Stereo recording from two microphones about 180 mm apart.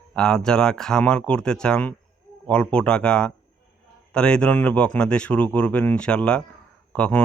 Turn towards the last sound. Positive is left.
turn(degrees=5)  # may be behind; listen again after turning